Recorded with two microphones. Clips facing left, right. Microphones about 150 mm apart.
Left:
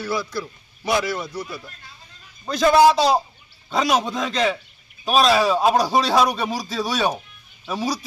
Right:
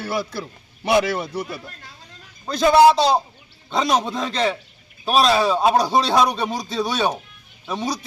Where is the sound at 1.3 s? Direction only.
55° right (ahead or behind).